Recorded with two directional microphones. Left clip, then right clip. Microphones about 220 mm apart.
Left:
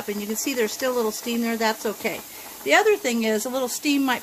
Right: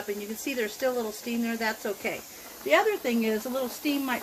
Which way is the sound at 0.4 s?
50° left (ahead or behind).